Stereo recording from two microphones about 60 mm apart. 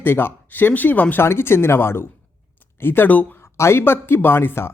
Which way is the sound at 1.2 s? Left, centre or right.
Left.